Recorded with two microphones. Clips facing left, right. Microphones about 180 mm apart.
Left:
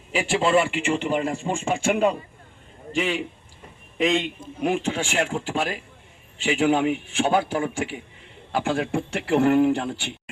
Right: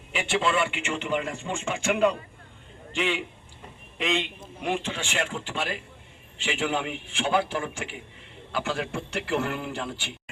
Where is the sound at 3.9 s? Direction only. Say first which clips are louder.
Left 6 dB; 40° left (ahead or behind).